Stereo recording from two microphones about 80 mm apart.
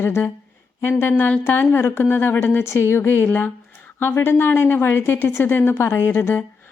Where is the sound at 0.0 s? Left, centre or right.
Left.